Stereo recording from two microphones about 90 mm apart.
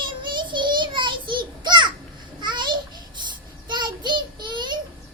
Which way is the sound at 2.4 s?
60° right (ahead or behind).